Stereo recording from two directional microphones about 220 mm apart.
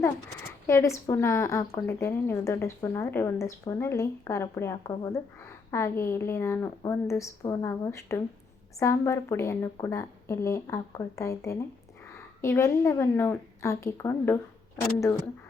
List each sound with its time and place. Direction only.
0.0 s a woman's voice: 10° left (ahead or behind)